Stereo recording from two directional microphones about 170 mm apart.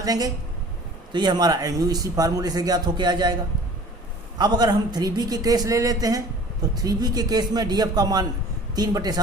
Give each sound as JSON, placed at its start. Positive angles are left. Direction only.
{"t": 0.0, "sound": "speech", "side_deg": -20}
{"t": 4.4, "sound": "speech", "side_deg": -25}